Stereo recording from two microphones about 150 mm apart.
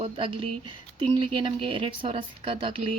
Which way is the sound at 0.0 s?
35° right (ahead or behind).